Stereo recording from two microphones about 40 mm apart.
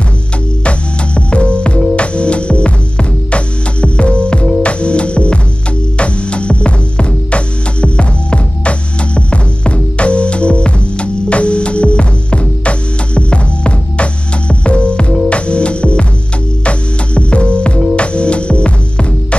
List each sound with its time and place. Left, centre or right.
0.7 s music: left